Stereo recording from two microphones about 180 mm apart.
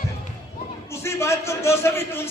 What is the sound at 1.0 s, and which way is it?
A man's voice, 15° left (ahead or behind).